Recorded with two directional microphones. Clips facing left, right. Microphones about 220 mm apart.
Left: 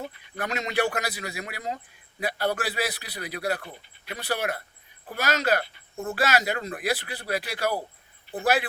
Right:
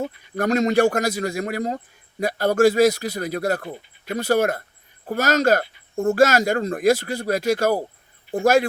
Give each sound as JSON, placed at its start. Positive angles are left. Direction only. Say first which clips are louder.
{"t": 0.0, "sound": "speech", "louder": "right 10 dB", "side_deg": -45}